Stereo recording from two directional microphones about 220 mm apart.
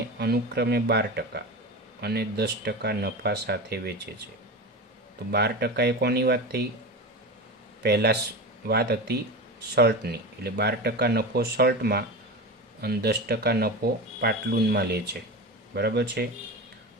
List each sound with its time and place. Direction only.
0.2 s speech: 45° right (ahead or behind)
5.3 s speech: 50° right (ahead or behind)
7.8 s speech: 50° right (ahead or behind)